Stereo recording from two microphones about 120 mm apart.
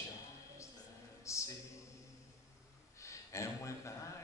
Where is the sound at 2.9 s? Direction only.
25° left (ahead or behind).